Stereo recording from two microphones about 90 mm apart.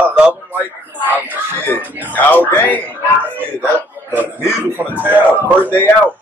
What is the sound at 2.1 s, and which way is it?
Speech, 20° left (ahead or behind).